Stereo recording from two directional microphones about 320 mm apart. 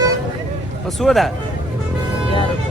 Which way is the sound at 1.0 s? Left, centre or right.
Centre.